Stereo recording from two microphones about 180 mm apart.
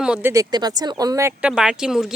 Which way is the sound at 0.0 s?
10° right (ahead or behind).